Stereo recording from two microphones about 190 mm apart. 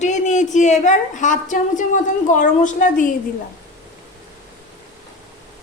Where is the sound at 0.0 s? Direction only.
40° left (ahead or behind).